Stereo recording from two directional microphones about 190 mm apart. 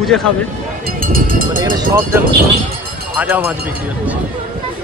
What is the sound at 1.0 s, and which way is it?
Speech, 45° right (ahead or behind).